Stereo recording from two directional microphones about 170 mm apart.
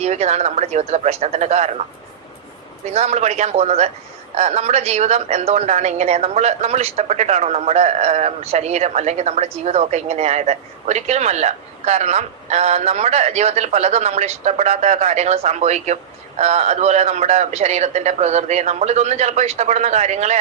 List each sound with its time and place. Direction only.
0.0 s a woman's voice: 40° right (ahead or behind)
2.8 s a woman's voice: 40° right (ahead or behind)